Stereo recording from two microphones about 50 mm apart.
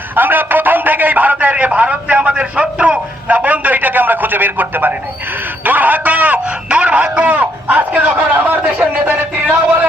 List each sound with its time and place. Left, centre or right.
0.2 s a man's voice: right